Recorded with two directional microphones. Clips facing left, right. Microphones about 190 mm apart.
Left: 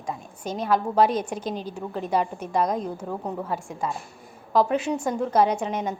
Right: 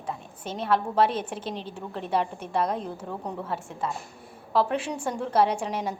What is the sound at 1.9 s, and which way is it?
A woman's voice, centre (ahead or behind).